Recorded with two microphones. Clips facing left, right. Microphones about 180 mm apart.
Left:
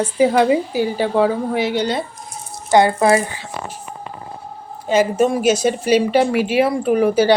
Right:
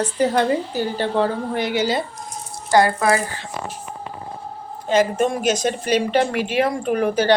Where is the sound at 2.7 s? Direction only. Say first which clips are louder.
Left 3 dB; 25° left (ahead or behind).